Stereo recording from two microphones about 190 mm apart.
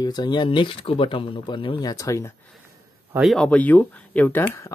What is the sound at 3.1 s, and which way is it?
Speech, centre (ahead or behind).